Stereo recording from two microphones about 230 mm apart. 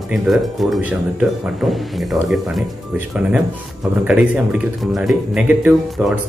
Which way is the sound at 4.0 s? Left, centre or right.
Centre.